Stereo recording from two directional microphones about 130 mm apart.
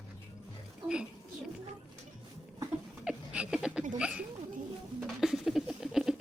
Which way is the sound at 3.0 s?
5° right (ahead or behind).